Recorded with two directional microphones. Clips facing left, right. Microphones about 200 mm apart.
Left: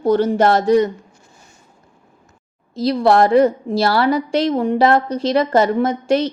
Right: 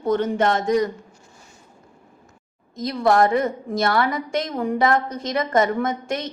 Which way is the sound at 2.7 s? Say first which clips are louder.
Left 5 dB; 30° left (ahead or behind).